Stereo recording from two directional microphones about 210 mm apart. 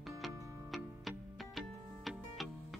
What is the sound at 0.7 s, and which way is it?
Music, centre (ahead or behind).